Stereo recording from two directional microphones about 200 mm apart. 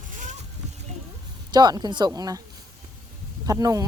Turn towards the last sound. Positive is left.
turn(degrees=-15)  # may be behind; listen again after turning